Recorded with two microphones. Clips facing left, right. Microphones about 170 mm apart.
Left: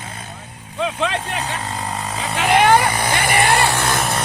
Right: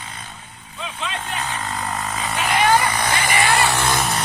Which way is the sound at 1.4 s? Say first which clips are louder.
Left 1 dB; 35° left (ahead or behind).